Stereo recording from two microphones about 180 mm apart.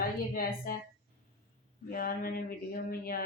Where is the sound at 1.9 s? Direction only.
55° left (ahead or behind).